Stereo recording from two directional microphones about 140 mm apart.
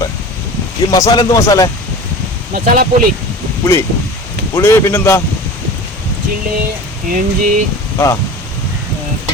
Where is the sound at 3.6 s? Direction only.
20° left (ahead or behind).